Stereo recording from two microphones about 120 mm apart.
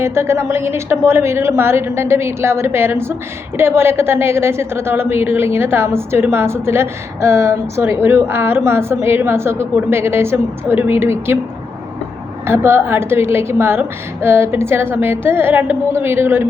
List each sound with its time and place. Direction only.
0.0 s a woman's voice: 20° right (ahead or behind)
12.5 s a woman's voice: 20° right (ahead or behind)